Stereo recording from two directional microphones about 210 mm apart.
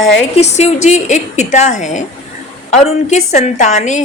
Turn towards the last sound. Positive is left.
turn(degrees=35)  # may be behind; listen again after turning